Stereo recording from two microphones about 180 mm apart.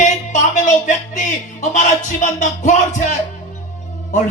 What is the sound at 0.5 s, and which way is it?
A man's voice, 45° left (ahead or behind).